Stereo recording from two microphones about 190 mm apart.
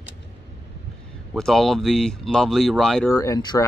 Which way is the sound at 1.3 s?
Centre (ahead or behind).